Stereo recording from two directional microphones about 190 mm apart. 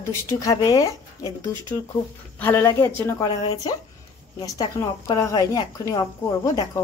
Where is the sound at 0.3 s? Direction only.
20° left (ahead or behind).